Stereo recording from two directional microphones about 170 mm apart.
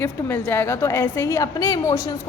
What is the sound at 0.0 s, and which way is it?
A woman's voice, 10° left (ahead or behind).